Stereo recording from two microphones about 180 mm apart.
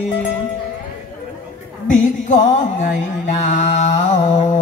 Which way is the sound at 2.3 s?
45° left (ahead or behind).